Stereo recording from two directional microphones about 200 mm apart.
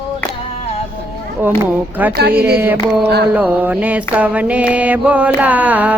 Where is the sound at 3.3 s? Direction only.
10° right (ahead or behind).